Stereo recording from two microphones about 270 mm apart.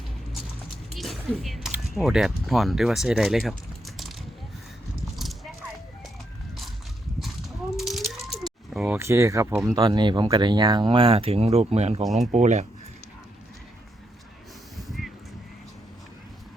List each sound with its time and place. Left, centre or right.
0.9 s speech: centre
5.1 s horse: centre
7.8 s speech: centre; by 12.0 s right
12.0 s speech: centre
12.3 s speech: right
14.8 s a sound: centre